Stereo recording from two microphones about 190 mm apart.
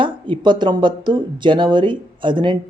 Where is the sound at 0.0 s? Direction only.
25° right (ahead or behind).